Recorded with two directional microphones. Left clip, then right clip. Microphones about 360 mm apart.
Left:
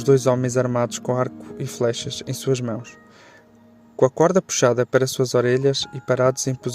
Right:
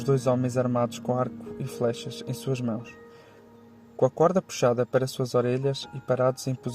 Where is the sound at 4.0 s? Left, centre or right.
Left.